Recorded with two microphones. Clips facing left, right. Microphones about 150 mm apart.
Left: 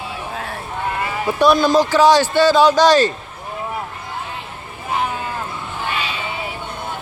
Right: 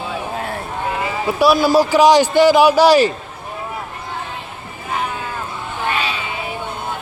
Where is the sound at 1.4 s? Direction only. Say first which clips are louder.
Right 1 dB; 5° right (ahead or behind).